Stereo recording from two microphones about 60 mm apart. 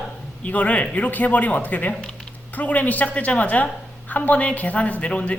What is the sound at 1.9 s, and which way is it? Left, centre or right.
Speech, centre.